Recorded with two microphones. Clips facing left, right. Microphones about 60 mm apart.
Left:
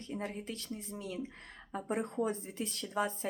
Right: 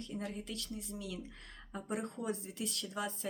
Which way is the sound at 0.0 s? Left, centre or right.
Left.